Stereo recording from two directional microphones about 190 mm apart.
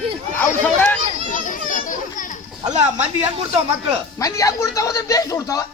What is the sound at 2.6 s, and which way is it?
Speech, 35° right (ahead or behind).